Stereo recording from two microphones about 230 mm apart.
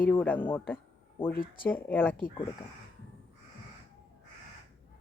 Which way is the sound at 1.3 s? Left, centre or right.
Left.